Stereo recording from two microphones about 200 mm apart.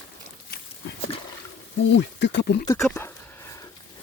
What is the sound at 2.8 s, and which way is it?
Speech, 5° left (ahead or behind).